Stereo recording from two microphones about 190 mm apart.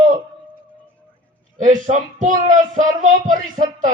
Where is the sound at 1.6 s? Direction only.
45° right (ahead or behind).